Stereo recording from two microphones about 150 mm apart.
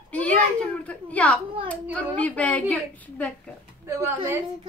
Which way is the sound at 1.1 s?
10° left (ahead or behind).